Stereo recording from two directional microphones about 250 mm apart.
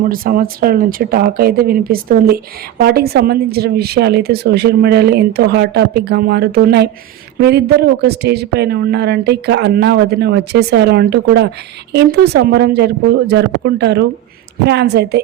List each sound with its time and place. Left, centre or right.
0.0 s speech: right